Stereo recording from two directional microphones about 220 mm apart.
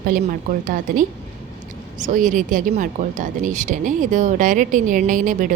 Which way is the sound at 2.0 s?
35° right (ahead or behind).